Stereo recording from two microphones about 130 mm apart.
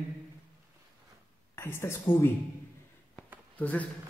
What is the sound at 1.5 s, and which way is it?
Speech, 20° left (ahead or behind).